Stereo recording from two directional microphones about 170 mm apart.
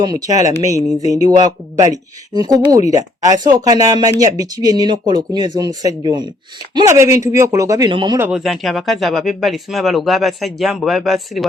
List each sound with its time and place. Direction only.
0.0 s speech: 20° right (ahead or behind)
8.2 s speech: 5° right (ahead or behind)